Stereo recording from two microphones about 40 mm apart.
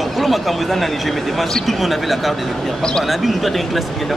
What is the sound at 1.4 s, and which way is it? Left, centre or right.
Speech, centre.